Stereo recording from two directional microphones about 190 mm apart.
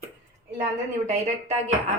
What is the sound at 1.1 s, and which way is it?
Speech, 35° right (ahead or behind).